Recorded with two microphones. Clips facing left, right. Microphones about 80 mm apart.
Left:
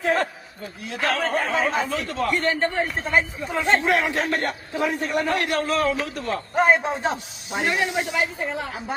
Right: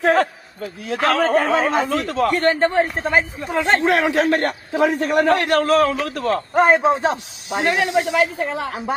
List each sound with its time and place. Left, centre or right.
0.0 s a man's voice: right
2.4 s a man's voice: right
3.0 s a man's voice: right